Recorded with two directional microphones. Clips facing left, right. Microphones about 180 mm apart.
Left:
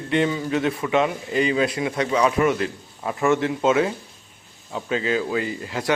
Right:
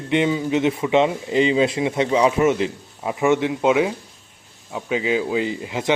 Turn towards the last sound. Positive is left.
turn(degrees=-20)  # may be behind; listen again after turning